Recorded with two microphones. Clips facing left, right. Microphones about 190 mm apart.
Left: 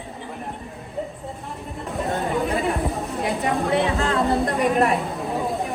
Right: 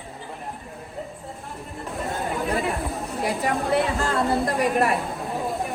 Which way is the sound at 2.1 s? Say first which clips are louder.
Left 3 dB; centre (ahead or behind).